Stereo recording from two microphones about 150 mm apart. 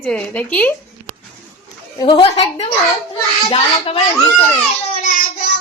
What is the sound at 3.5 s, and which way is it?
Speech, 40° left (ahead or behind).